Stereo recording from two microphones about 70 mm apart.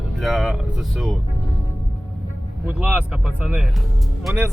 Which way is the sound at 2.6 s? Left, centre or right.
Right.